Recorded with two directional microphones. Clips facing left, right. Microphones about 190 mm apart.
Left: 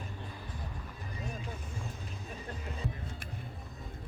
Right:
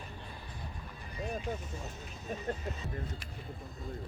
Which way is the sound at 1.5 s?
45° right (ahead or behind).